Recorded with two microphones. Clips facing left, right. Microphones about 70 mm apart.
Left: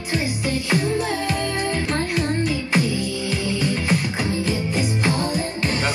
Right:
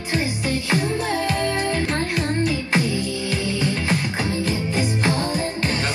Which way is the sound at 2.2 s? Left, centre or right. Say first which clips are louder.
Even; right.